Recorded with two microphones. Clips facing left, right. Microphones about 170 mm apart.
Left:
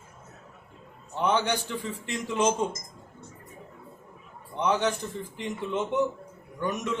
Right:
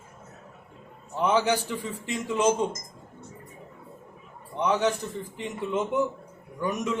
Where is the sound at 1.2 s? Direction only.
5° right (ahead or behind).